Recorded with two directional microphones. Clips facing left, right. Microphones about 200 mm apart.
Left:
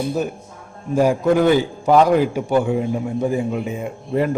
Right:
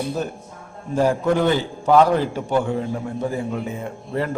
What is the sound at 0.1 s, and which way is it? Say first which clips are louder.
A man's voice: left 3 dB; 10° left (ahead or behind).